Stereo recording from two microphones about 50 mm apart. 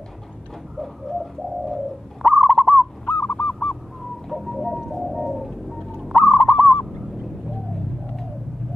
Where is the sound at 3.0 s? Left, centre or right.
Left.